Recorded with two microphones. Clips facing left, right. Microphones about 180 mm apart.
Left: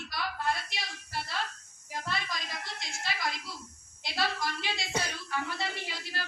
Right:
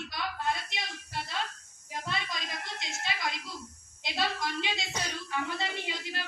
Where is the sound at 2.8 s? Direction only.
20° right (ahead or behind).